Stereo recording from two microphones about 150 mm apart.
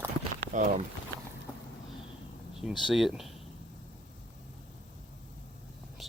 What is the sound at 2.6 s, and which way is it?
Speech, centre (ahead or behind).